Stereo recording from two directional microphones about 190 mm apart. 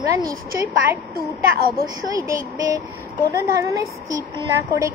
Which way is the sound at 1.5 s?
50° right (ahead or behind).